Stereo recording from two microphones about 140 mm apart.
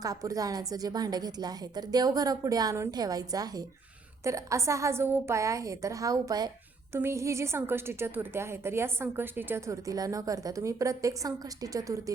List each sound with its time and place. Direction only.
0.0 s a woman's voice: 25° right (ahead or behind)